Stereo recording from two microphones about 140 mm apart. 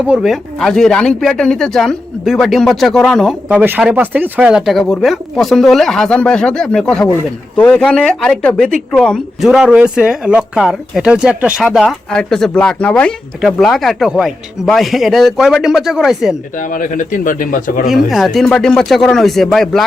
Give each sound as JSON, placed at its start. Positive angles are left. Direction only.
{"t": 0.0, "sound": "speech", "side_deg": -5}
{"t": 3.5, "sound": "speech", "side_deg": -10}
{"t": 16.6, "sound": "a man's voice", "side_deg": 70}
{"t": 17.8, "sound": "speech", "side_deg": 0}